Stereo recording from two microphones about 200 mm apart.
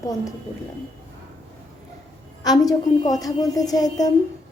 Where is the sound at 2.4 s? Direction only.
20° left (ahead or behind).